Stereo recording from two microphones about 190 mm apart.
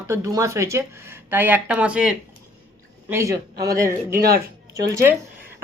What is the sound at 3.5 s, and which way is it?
Speech, 55° right (ahead or behind).